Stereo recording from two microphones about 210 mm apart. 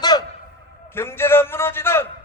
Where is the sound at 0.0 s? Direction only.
20° left (ahead or behind).